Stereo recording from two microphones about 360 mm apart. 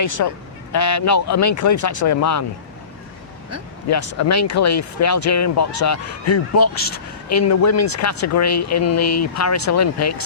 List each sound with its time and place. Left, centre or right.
0.2 s speech: left
3.9 s speech: left